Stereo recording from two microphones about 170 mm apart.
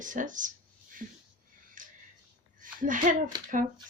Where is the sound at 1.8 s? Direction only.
50° right (ahead or behind).